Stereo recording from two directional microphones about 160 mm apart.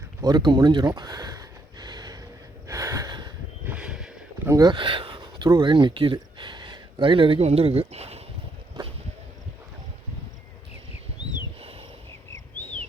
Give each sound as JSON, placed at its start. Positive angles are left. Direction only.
{"t": 0.2, "sound": "gasp", "side_deg": -25}
{"t": 3.7, "sound": "a sound", "side_deg": -5}
{"t": 4.4, "sound": "speech", "side_deg": -25}